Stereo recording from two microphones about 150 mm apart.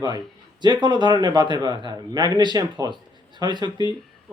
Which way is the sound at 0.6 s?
30° right (ahead or behind).